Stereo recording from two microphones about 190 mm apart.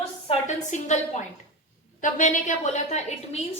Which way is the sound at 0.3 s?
40° left (ahead or behind).